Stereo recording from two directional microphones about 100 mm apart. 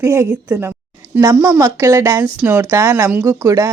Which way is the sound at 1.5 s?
35° right (ahead or behind).